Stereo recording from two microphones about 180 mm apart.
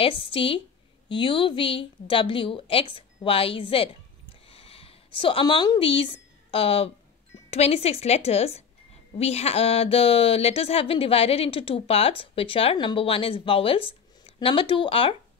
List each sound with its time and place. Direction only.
0.0 s a woman's voice: 30° left (ahead or behind)
4.5 s a sound: 30° left (ahead or behind)
7.5 s speech: 35° left (ahead or behind)